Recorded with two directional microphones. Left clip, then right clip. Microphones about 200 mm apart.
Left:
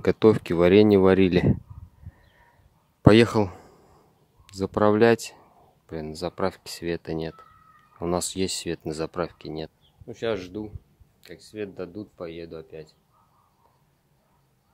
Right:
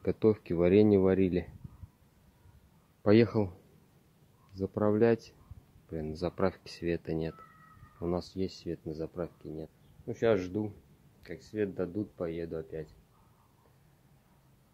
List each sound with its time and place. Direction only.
0.0 s speech: 35° left (ahead or behind)
3.1 s speech: 40° left (ahead or behind)
5.9 s speech: 25° left (ahead or behind)
8.0 s speech: 35° left (ahead or behind)
10.0 s speech: 5° left (ahead or behind)